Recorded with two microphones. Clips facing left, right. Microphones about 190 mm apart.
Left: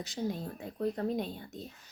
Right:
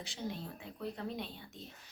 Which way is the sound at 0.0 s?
40° left (ahead or behind).